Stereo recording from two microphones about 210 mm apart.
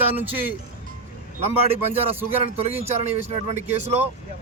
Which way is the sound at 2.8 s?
30° right (ahead or behind).